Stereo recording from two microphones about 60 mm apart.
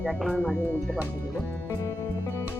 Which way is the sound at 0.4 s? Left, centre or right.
Right.